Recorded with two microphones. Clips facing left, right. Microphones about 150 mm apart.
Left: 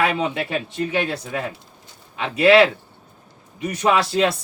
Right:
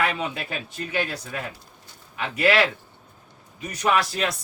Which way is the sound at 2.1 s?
25° left (ahead or behind).